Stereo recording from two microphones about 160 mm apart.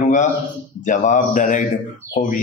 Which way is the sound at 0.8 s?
50° left (ahead or behind).